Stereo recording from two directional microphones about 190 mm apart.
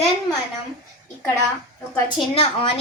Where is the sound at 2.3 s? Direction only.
30° left (ahead or behind).